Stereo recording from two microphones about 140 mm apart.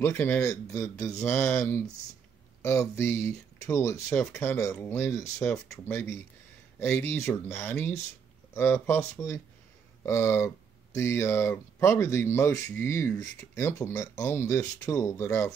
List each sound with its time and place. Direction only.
0.0 s speech: 15° left (ahead or behind)